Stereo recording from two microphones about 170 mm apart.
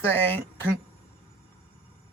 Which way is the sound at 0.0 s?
10° left (ahead or behind).